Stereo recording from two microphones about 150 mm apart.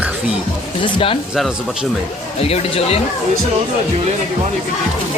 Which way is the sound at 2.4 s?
40° left (ahead or behind).